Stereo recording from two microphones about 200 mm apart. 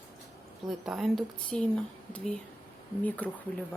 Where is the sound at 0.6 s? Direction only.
Centre (ahead or behind).